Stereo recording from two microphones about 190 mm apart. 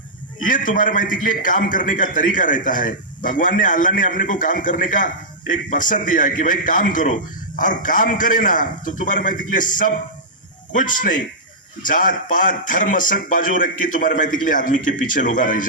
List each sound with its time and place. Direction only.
0.4 s a man's voice: 45° left (ahead or behind)